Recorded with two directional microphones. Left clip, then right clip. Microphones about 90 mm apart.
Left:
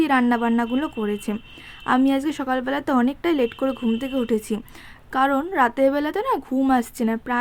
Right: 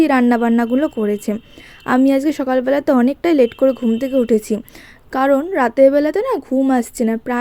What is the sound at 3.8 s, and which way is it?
Speech, 30° right (ahead or behind).